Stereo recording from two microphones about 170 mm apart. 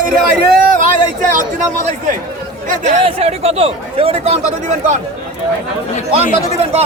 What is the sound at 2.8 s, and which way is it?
Speech, 40° right (ahead or behind).